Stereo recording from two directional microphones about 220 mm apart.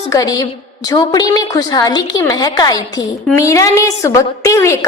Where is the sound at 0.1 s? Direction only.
15° left (ahead or behind).